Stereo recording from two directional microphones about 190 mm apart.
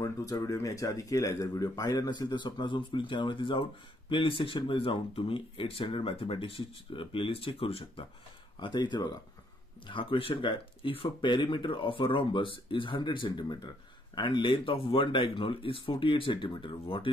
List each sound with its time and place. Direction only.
0.0 s speech: 15° left (ahead or behind)